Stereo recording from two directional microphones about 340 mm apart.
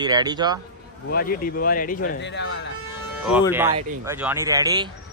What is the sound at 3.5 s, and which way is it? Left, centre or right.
Speech, centre.